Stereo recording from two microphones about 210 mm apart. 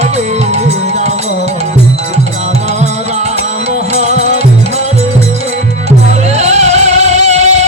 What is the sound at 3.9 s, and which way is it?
Music, 30° right (ahead or behind).